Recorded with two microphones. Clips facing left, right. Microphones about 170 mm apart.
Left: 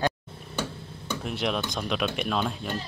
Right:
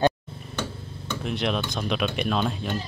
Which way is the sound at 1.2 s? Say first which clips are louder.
Right 2 dB; 5° left (ahead or behind).